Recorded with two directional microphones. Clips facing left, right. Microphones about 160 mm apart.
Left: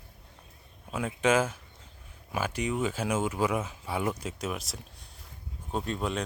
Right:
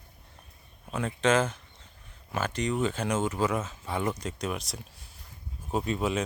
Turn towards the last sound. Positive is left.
turn(degrees=-5)  # may be behind; listen again after turning